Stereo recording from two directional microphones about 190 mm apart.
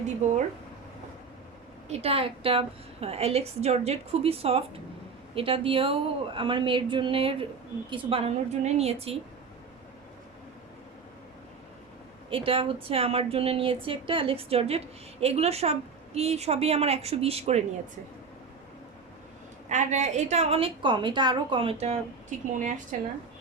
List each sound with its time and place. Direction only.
0.2 s a woman's voice: 35° right (ahead or behind)
1.9 s a woman's voice: 30° right (ahead or behind)
12.3 s a woman's voice: 30° right (ahead or behind)
19.6 s a woman's voice: 40° right (ahead or behind)
22.5 s a woman's voice: 40° right (ahead or behind)